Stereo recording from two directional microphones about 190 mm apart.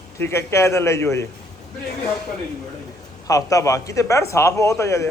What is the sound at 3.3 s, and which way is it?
A man's voice, 15° left (ahead or behind).